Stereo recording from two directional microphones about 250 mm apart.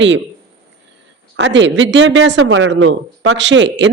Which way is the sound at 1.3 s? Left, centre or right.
Right.